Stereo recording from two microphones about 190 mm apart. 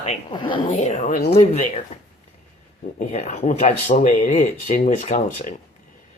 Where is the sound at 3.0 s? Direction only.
35° left (ahead or behind).